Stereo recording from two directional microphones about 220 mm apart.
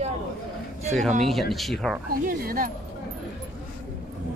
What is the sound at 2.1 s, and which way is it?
Speech, 40° right (ahead or behind).